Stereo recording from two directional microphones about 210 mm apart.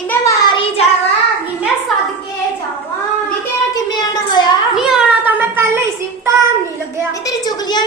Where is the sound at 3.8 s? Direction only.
20° left (ahead or behind).